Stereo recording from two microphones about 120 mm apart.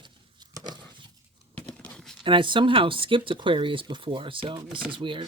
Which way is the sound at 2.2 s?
45° right (ahead or behind).